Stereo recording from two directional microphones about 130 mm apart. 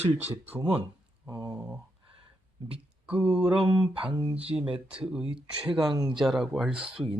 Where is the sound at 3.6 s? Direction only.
40° right (ahead or behind).